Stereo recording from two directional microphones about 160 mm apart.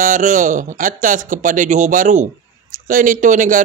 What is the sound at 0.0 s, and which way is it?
A man's voice, 55° right (ahead or behind).